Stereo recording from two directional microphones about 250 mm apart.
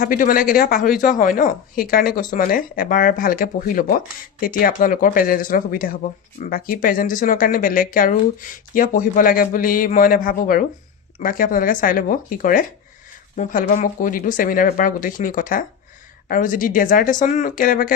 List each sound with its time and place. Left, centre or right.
0.0 s speech: left